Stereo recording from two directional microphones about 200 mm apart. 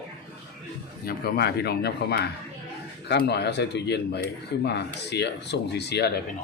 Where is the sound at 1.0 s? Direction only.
50° left (ahead or behind).